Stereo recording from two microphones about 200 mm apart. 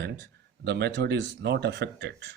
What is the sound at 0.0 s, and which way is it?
Speech, 55° right (ahead or behind).